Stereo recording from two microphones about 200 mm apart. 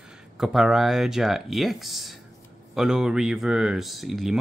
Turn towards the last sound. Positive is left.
turn(degrees=0)  # may be behind; listen again after turning